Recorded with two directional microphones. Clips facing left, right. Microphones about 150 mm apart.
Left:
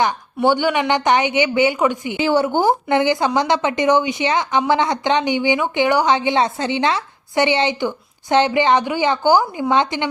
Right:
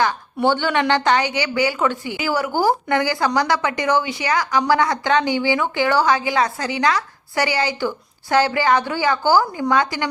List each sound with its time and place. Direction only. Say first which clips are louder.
0.4 s a woman's voice: left 2 dB; 15° left (ahead or behind)